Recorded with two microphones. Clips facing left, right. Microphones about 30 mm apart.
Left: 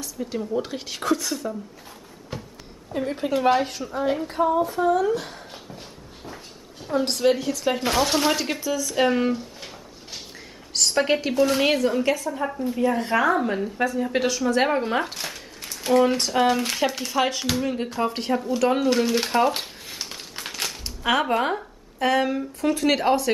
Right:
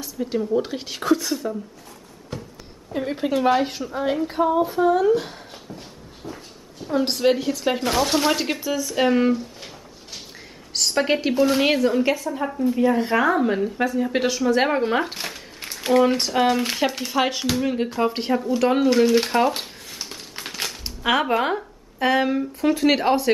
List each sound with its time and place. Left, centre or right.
0.0 s a woman's voice: centre
2.3 s a sound: centre
2.9 s a woman's voice: centre
6.2 s a sound: centre
6.9 s a woman's voice: centre
7.8 s speech: centre
8.9 s speech: centre
10.7 s a woman's voice: centre
12.4 s a woman's voice: centre
15.6 s a sound: right
15.9 s a woman's voice: centre
18.6 s a sound: centre
20.5 s speech: centre